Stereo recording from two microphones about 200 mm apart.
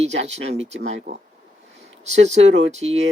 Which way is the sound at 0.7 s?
60° right (ahead or behind).